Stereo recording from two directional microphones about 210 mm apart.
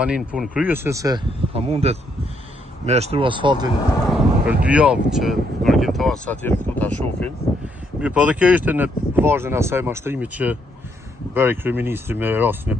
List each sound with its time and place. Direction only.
0.0 s speech: 5° right (ahead or behind)
1.5 s speech: 30° right (ahead or behind)
3.7 s speech: 15° left (ahead or behind)
4.0 s speech: centre (ahead or behind)
8.0 s speech: 5° right (ahead or behind)